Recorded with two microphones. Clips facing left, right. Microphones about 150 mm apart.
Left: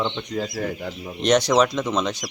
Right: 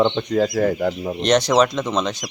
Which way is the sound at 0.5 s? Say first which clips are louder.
Right 9 dB; 45° right (ahead or behind).